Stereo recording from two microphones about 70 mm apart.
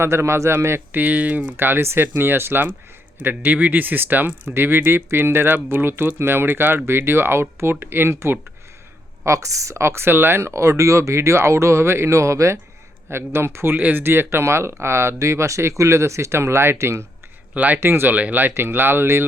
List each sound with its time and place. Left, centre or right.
0.0 s speech: right
0.9 s speech: right
1.5 s speech: right
9.2 s speech: right
13.7 s speech: right
17.5 s speech: right
17.7 s speech: right